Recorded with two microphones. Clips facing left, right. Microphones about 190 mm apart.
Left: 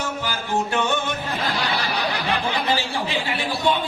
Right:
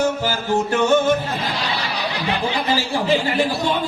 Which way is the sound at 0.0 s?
40° right (ahead or behind).